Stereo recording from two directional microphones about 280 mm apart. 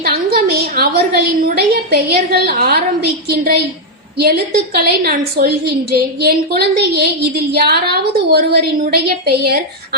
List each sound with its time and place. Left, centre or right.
0.0 s a woman's voice: right